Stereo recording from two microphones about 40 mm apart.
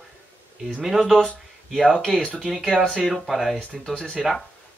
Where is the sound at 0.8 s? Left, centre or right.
Centre.